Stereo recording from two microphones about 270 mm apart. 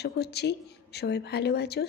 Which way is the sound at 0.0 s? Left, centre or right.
Left.